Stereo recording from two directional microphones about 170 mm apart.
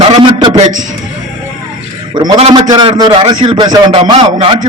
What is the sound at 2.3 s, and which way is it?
Speech, 35° right (ahead or behind).